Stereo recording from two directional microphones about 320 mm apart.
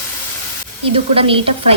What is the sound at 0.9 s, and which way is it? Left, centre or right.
Speech, centre.